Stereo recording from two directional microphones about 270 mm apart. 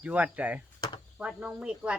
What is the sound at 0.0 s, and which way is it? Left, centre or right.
Speech, centre.